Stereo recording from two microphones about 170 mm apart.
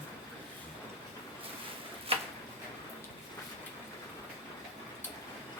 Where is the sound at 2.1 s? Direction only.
35° right (ahead or behind).